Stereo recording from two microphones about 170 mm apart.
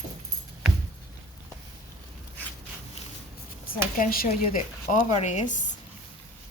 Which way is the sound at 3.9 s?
60° left (ahead or behind).